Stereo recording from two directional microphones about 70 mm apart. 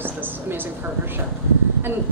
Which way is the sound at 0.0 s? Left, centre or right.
Right.